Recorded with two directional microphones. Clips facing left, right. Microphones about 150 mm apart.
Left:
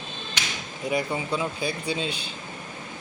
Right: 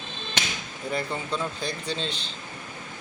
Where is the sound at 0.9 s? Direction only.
10° left (ahead or behind).